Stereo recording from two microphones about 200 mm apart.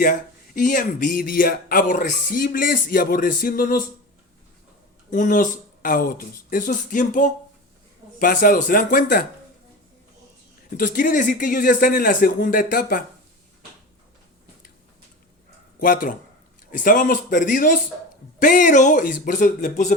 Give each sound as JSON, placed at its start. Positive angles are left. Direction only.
{"t": 0.0, "sound": "speech", "side_deg": 40}
{"t": 5.1, "sound": "speech", "side_deg": 40}
{"t": 10.8, "sound": "speech", "side_deg": 45}
{"t": 15.8, "sound": "speech", "side_deg": 45}